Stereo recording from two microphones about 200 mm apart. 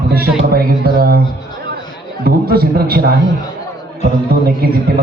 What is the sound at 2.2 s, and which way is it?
Speech, 50° right (ahead or behind).